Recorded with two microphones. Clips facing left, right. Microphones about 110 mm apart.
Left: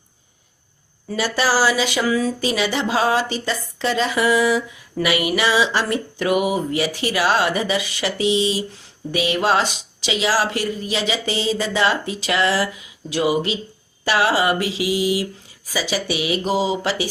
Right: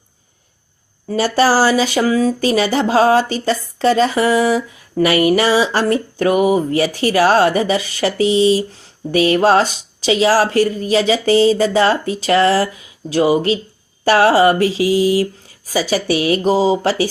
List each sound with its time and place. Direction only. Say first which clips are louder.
1.0 s speech: right 7 dB; 40° right (ahead or behind)